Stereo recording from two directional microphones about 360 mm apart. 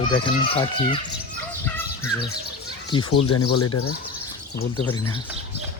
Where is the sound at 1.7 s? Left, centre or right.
Centre.